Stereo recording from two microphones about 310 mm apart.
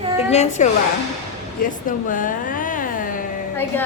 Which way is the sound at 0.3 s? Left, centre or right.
Left.